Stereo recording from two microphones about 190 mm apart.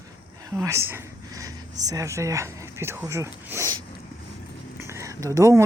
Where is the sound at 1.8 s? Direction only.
20° right (ahead or behind).